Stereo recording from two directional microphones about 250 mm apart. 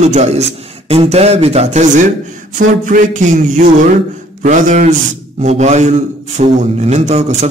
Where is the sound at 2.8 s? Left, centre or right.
Right.